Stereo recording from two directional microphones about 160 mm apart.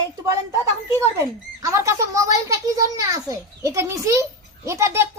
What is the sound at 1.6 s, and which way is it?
A child's voice, 20° right (ahead or behind).